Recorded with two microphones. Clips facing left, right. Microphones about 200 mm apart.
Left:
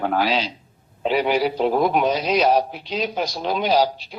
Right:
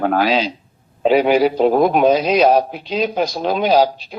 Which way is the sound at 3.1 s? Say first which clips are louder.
Right 5 dB; 50° right (ahead or behind).